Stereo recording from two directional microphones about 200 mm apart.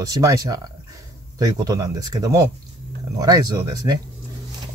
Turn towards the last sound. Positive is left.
turn(degrees=-20)  # may be behind; listen again after turning